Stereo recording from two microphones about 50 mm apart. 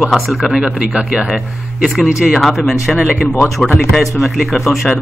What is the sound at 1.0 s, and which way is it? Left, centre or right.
Speech, centre.